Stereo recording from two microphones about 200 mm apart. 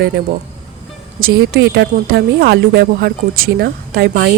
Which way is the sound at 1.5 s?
60° right (ahead or behind).